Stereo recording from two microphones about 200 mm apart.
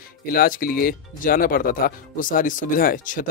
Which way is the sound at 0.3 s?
45° left (ahead or behind).